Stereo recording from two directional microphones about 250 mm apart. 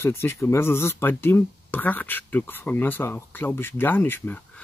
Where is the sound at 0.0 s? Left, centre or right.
Centre.